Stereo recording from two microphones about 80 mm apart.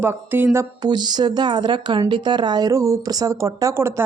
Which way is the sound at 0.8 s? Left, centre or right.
Right.